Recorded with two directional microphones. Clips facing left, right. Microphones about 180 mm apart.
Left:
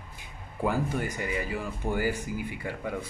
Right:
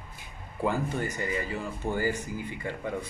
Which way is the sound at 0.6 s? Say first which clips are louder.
Even; 10° left (ahead or behind).